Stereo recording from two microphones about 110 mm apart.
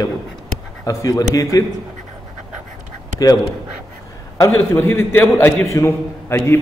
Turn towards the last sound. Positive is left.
turn(degrees=25)  # may be behind; listen again after turning